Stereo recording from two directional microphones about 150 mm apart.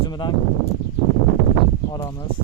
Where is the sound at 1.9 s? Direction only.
30° left (ahead or behind).